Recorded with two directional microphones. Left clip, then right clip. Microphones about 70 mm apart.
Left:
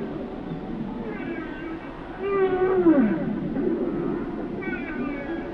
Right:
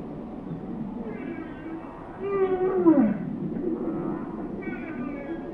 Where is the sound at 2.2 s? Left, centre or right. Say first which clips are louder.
Left 2 dB; right.